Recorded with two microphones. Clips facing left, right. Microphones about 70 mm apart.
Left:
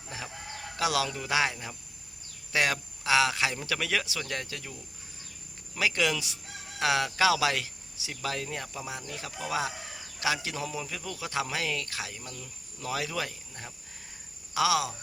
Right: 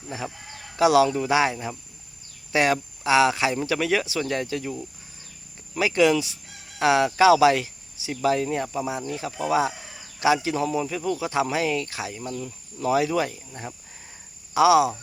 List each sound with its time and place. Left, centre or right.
0.8 s speech: centre
5.7 s speech: centre